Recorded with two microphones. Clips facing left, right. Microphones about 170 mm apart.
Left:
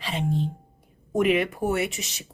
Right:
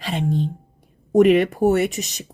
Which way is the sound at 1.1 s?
45° right (ahead or behind).